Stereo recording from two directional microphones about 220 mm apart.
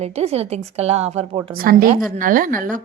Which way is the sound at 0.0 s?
30° right (ahead or behind).